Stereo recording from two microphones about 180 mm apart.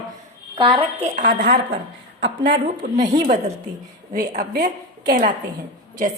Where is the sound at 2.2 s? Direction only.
85° right.